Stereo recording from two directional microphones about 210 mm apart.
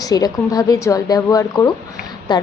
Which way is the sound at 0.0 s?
15° left (ahead or behind).